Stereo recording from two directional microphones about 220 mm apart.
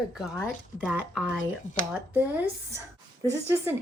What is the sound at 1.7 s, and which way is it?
Speech, 35° left (ahead or behind).